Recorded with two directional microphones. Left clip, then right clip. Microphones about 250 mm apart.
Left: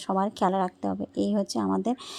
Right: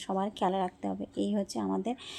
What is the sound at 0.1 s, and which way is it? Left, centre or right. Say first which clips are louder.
Speech: left 5 dB; left.